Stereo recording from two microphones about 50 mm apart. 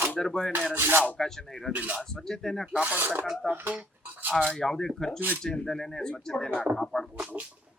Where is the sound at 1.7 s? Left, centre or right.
Right.